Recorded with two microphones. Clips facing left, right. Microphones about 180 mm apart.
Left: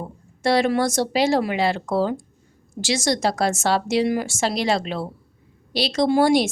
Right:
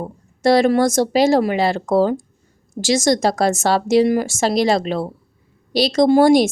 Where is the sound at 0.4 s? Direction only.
40° right (ahead or behind).